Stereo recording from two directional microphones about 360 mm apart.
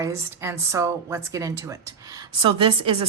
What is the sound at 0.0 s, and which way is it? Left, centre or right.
A woman's voice, centre.